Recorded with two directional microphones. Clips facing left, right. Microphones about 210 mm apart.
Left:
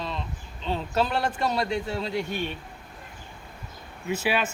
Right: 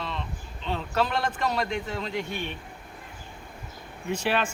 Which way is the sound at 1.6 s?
35° left (ahead or behind).